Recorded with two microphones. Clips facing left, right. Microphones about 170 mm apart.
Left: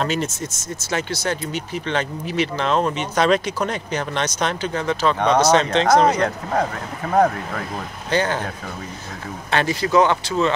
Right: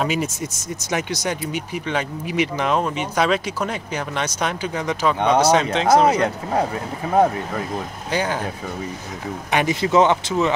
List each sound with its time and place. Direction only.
0.0 s speech: 10° right (ahead or behind)
8.1 s speech: 10° right (ahead or behind)
9.5 s speech: 15° right (ahead or behind)